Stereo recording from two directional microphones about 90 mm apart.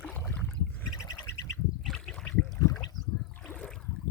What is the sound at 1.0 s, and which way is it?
Bird, 35° left (ahead or behind).